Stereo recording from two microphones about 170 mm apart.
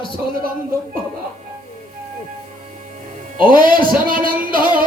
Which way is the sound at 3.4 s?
55° right (ahead or behind).